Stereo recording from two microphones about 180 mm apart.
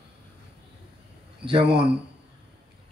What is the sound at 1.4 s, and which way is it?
Speech, 30° right (ahead or behind).